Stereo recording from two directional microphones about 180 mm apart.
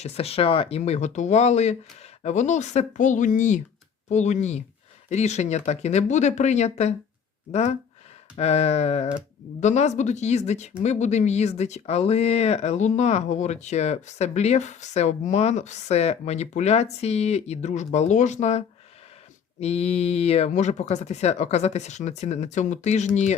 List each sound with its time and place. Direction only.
0.0 s speech: 35° left (ahead or behind)